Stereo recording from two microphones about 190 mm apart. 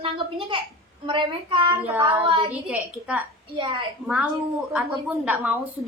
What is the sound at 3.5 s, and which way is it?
Speech, 25° right (ahead or behind).